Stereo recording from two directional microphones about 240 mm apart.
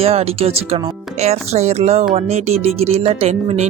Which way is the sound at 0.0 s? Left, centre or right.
Right.